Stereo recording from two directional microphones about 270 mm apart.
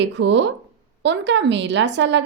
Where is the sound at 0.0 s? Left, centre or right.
Right.